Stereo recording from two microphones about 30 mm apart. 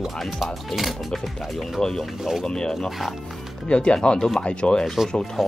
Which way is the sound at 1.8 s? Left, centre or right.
Left.